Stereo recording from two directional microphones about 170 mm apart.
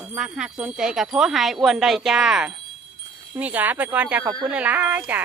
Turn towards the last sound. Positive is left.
turn(degrees=-10)  # may be behind; listen again after turning